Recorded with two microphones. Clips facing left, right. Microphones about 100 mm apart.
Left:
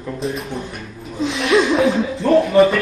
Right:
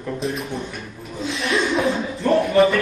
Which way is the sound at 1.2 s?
90° left.